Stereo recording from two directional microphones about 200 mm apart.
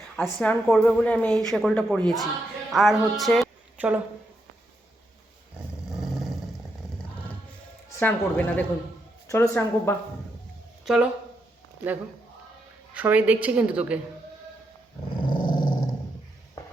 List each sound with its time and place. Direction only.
0.2 s a woman's voice: 5° left (ahead or behind)
7.9 s speech: 10° left (ahead or behind)
10.8 s speech: 5° right (ahead or behind)
12.9 s a woman's voice: 5° right (ahead or behind)
15.3 s dog: 25° left (ahead or behind)